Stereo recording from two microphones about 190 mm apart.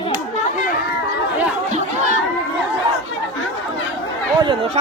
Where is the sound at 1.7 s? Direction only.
40° right (ahead or behind).